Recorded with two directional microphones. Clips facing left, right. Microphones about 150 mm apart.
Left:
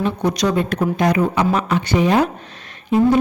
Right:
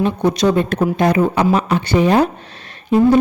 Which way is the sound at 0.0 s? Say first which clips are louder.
Right 4 dB; 25° right (ahead or behind).